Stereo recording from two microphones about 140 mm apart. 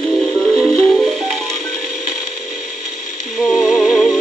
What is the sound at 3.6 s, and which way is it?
Music, centre (ahead or behind).